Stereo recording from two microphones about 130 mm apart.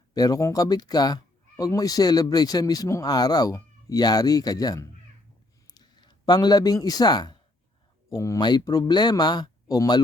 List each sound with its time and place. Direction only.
0.1 s speech: 30° left (ahead or behind)